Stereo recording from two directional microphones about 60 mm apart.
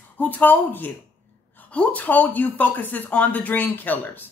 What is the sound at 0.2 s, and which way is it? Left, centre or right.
Speech, left.